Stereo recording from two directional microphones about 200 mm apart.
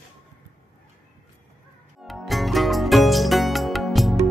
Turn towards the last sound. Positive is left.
turn(degrees=0)  # may be behind; listen again after turning